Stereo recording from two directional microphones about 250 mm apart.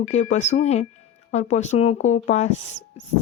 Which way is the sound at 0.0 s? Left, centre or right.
Left.